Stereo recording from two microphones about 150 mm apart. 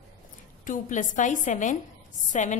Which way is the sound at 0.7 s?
55° left (ahead or behind).